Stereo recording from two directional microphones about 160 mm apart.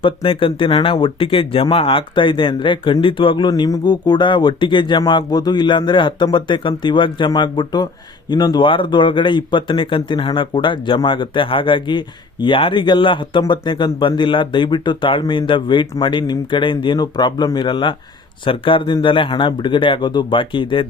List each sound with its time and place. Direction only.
0.0 s speech: 35° left (ahead or behind)